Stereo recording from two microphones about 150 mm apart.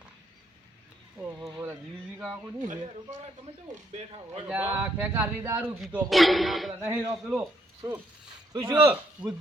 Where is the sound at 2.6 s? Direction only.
50° right (ahead or behind).